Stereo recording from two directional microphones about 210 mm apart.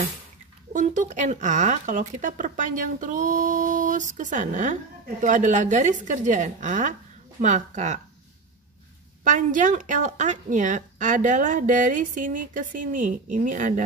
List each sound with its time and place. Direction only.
0.7 s a woman's voice: 35° right (ahead or behind)
9.2 s a woman's voice: 40° right (ahead or behind)